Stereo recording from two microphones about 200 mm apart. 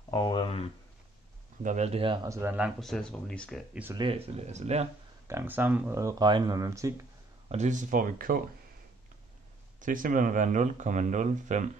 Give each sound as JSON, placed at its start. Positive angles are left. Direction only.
{"t": 0.1, "sound": "a sound", "side_deg": 20}
{"t": 1.6, "sound": "speech", "side_deg": -35}
{"t": 2.2, "sound": "speech", "side_deg": -15}
{"t": 3.9, "sound": "speech", "side_deg": -25}
{"t": 5.3, "sound": "speech", "side_deg": -10}
{"t": 7.4, "sound": "speech", "side_deg": -35}
{"t": 9.8, "sound": "speech", "side_deg": -40}